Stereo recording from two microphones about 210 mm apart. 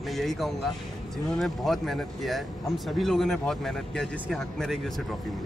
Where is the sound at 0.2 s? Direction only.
Centre (ahead or behind).